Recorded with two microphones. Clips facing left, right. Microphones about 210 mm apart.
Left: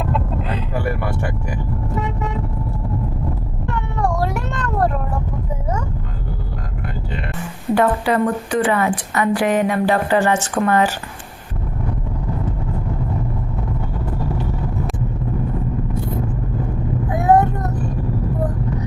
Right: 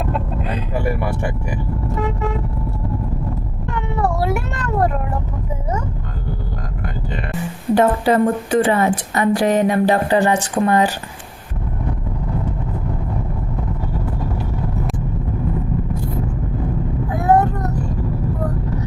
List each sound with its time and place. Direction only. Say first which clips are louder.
3.9 s cat: right 2 dB; 5° right (ahead or behind)
8.0 s speech: right 3 dB; 30° right (ahead or behind)
8.8 s a woman's voice: right 2 dB; 40° right (ahead or behind)
9.6 s speech: right 2 dB; 25° right (ahead or behind)
17.2 s child singing: left 1 dB; 20° left (ahead or behind)